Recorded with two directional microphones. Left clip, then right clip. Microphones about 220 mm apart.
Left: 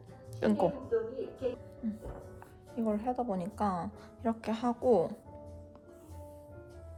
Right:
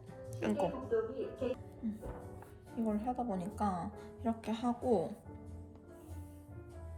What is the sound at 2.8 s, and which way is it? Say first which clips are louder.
Speech: left 4 dB; 30° left (ahead or behind).